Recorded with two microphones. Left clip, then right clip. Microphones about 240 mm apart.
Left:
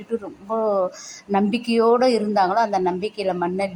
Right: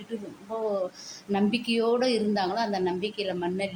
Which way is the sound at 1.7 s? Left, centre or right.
Centre.